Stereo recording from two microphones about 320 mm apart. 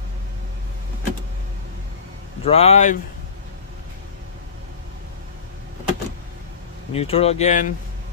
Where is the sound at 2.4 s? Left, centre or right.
Centre.